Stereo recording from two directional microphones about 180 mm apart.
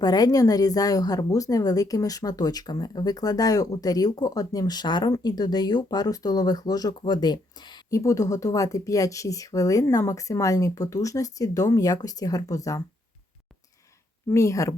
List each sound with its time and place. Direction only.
0.0 s a woman's voice: 20° left (ahead or behind)
14.3 s speech: 15° left (ahead or behind)